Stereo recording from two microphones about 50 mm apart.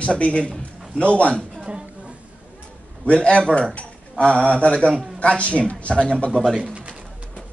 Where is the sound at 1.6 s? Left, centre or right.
Centre.